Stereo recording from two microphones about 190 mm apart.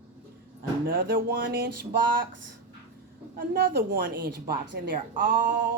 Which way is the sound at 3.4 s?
55° right (ahead or behind).